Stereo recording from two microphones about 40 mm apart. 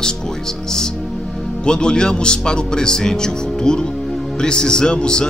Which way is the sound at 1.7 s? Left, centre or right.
Centre.